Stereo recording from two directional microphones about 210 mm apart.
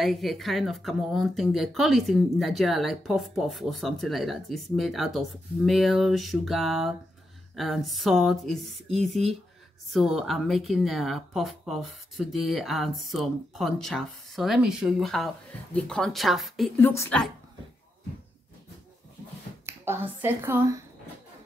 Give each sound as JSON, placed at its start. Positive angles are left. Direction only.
{"t": 0.0, "sound": "speech", "side_deg": 0}
{"t": 16.7, "sound": "speech", "side_deg": 10}
{"t": 19.6, "sound": "speech", "side_deg": -10}